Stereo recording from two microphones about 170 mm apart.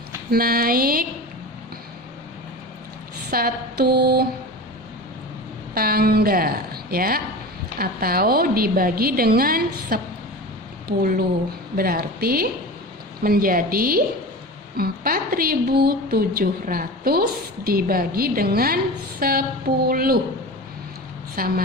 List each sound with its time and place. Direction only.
0.3 s a woman's voice: 60° right (ahead or behind)
3.2 s a sound: 60° right (ahead or behind)
5.7 s a woman's voice: 60° right (ahead or behind)
21.3 s a woman's voice: 60° right (ahead or behind)